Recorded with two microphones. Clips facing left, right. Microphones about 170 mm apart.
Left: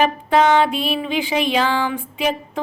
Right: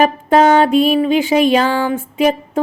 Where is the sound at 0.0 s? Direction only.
45° right (ahead or behind).